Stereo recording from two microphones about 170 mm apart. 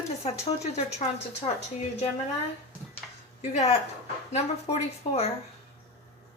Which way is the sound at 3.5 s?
40° left (ahead or behind).